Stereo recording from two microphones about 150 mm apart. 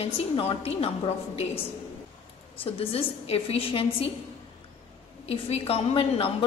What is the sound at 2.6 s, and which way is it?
A woman's voice, 40° left (ahead or behind).